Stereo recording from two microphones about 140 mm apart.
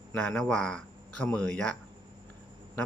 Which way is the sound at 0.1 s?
10° left (ahead or behind).